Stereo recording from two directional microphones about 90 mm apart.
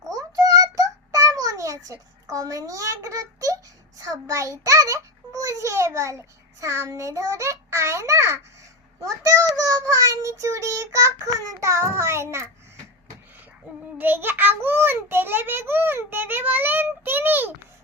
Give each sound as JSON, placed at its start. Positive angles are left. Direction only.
{"t": 0.2, "sound": "child singing", "side_deg": -40}
{"t": 14.0, "sound": "a child's voice", "side_deg": -20}